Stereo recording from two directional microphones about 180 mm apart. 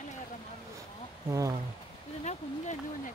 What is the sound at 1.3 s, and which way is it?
Speech, 20° right (ahead or behind).